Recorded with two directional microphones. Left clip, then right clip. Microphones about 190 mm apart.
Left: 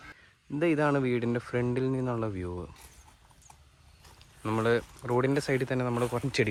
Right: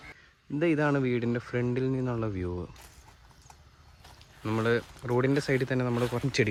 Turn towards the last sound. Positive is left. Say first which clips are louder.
# even
turn(degrees=-5)  # may be behind; listen again after turning